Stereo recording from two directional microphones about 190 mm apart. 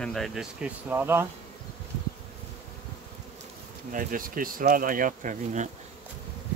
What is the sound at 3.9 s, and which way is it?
Speech, 45° right (ahead or behind).